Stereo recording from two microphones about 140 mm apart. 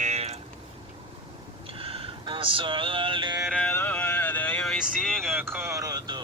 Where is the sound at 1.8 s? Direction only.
40° right (ahead or behind).